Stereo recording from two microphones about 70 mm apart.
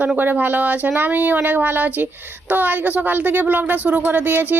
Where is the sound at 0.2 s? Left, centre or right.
Right.